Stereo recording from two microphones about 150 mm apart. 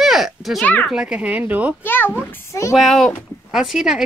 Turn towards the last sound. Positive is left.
turn(degrees=-5)  # may be behind; listen again after turning